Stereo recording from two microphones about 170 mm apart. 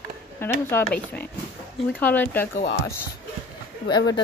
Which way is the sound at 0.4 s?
10° left (ahead or behind).